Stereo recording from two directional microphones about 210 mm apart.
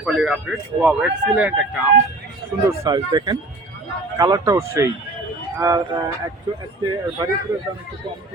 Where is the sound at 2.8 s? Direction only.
20° right (ahead or behind).